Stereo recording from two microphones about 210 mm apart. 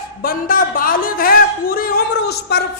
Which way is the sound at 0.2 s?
40° left (ahead or behind).